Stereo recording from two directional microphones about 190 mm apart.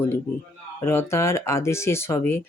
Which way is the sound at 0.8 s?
15° left (ahead or behind).